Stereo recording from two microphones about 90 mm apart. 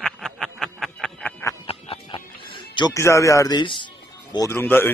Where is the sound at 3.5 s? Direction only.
60° left (ahead or behind).